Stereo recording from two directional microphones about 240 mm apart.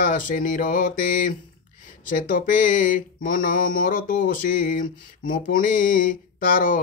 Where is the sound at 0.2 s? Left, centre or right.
Left.